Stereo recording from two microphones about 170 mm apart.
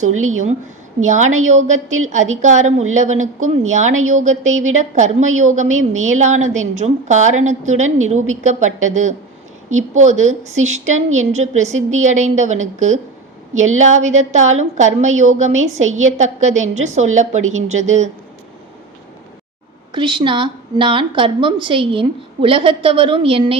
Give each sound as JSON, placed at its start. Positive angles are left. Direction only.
{"t": 0.9, "sound": "a woman's voice", "side_deg": -45}
{"t": 19.9, "sound": "a woman's voice", "side_deg": -25}